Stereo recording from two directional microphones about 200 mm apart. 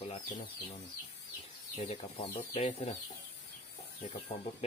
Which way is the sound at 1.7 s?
30° left (ahead or behind).